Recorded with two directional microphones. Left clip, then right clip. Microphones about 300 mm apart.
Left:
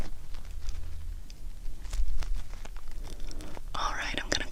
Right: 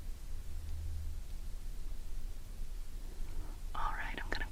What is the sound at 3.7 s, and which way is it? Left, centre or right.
Whispering, left.